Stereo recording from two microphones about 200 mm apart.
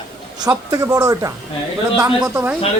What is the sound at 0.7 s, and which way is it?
Speech, 20° right (ahead or behind).